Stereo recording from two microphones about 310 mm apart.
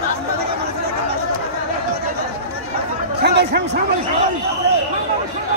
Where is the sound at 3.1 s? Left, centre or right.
Right.